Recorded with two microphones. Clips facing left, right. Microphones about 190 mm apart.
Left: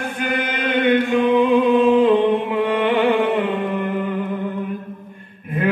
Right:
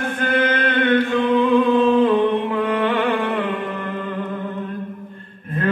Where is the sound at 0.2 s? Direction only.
15° left (ahead or behind).